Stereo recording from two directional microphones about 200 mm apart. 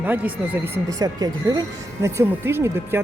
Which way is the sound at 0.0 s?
10° right (ahead or behind).